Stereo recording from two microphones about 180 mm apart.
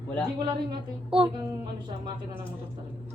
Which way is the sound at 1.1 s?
30° right (ahead or behind).